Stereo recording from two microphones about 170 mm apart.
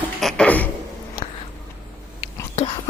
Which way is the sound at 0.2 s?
5° left (ahead or behind).